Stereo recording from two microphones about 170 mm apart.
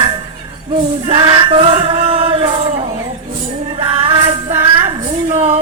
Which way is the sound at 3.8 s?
30° right (ahead or behind).